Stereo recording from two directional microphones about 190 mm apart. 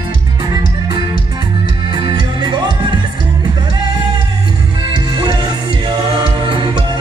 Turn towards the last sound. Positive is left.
turn(degrees=-25)  # may be behind; listen again after turning